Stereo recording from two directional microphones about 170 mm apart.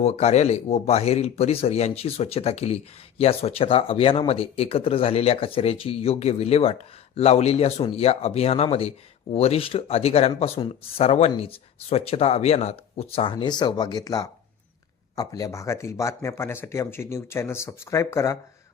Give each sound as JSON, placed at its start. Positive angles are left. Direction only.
{"t": 0.0, "sound": "speech", "side_deg": 40}